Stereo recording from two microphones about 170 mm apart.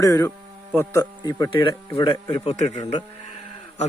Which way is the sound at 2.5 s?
40° left (ahead or behind).